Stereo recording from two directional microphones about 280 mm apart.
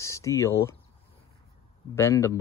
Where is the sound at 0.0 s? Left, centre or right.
Centre.